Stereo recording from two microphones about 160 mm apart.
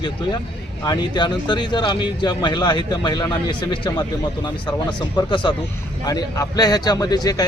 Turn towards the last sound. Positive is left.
turn(degrees=25)  # may be behind; listen again after turning